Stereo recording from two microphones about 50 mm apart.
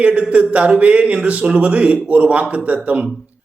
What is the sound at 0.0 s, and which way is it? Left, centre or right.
A man's voice, right.